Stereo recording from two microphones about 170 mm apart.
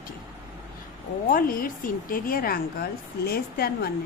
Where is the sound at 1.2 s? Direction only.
55° left (ahead or behind).